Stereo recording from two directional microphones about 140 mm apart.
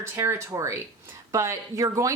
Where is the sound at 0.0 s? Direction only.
20° right (ahead or behind).